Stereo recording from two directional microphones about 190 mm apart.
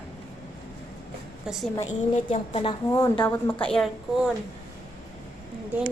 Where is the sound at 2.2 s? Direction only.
30° left (ahead or behind).